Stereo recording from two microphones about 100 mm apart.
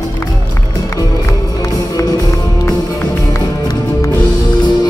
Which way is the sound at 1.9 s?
35° left (ahead or behind).